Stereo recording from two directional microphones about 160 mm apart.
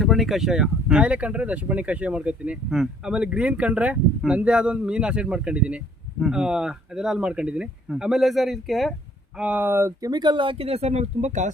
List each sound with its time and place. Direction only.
0.0 s a man's voice: centre (ahead or behind)
9.4 s speech: 10° right (ahead or behind); by 11.5 s 50° right (ahead or behind)